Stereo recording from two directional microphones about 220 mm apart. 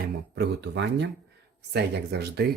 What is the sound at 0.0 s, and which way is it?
Speech, 45° right (ahead or behind).